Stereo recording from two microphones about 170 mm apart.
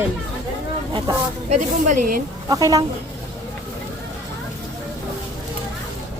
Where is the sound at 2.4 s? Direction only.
20° right (ahead or behind).